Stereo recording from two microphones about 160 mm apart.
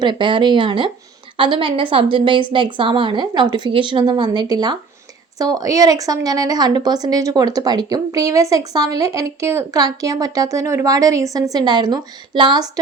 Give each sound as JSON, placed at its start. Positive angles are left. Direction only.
{"t": 0.0, "sound": "a woman's voice", "side_deg": -30}